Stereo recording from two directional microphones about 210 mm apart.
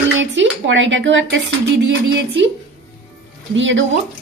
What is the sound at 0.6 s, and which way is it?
Speech, 60° right (ahead or behind).